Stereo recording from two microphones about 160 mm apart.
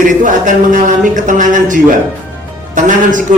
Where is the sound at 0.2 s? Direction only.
55° right (ahead or behind).